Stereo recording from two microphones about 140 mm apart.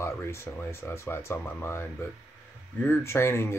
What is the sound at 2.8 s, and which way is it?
Speech, 20° left (ahead or behind).